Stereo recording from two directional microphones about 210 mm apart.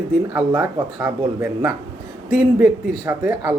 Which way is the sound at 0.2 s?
15° right (ahead or behind).